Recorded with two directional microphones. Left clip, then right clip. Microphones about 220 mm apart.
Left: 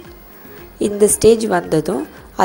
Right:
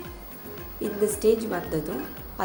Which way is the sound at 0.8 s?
40° left (ahead or behind).